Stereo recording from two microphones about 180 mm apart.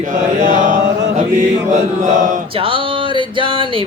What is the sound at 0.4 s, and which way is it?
Chant, 45° right (ahead or behind).